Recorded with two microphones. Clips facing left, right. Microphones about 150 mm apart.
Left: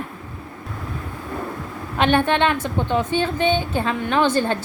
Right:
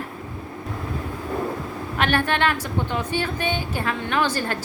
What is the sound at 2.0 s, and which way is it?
A woman's voice, 20° left (ahead or behind).